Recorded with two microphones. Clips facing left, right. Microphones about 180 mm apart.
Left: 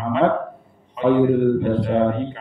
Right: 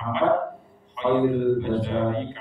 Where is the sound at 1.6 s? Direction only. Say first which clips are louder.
Left 5 dB; 55° left (ahead or behind).